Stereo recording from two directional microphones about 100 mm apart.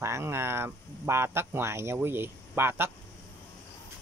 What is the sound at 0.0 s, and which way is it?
Speech, 25° right (ahead or behind).